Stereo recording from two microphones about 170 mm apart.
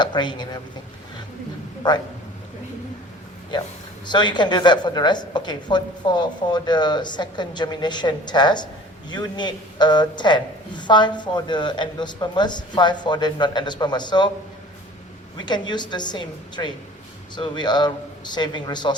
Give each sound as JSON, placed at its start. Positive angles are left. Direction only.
{"t": 0.0, "sound": "speech", "side_deg": 25}
{"t": 1.8, "sound": "a woman's voice", "side_deg": 25}
{"t": 4.0, "sound": "a woman's voice", "side_deg": 25}
{"t": 15.4, "sound": "a woman's voice", "side_deg": 25}